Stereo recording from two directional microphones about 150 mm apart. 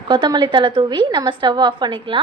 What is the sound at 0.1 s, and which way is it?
A woman's voice, 30° right (ahead or behind).